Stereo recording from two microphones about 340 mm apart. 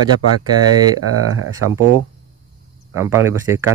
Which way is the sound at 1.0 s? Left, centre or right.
Right.